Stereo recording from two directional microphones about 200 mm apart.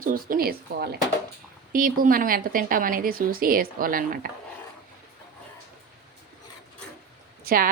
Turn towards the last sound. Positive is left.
turn(degrees=-45)  # may be behind; listen again after turning